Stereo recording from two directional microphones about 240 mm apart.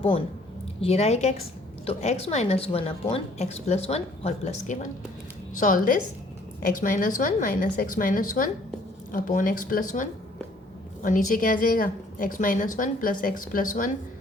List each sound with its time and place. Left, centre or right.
0.8 s a woman's voice: left
11.0 s a woman's voice: left